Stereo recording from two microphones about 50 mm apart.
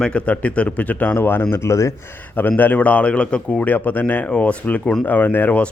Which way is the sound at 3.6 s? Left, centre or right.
Left.